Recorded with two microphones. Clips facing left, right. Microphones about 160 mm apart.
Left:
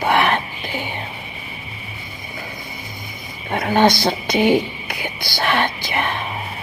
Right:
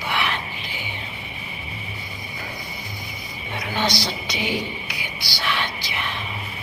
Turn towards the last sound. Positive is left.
turn(degrees=55)  # may be behind; listen again after turning